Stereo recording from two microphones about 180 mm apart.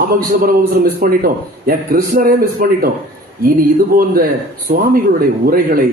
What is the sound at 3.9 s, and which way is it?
Speech, 55° right (ahead or behind).